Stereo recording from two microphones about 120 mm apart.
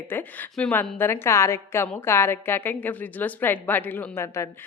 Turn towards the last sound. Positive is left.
turn(degrees=25)  # may be behind; listen again after turning